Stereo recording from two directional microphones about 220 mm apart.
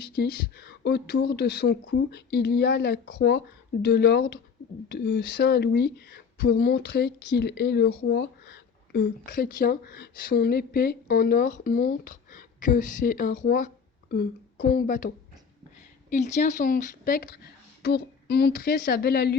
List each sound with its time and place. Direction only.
0.0 s a woman's voice: 50° left (ahead or behind)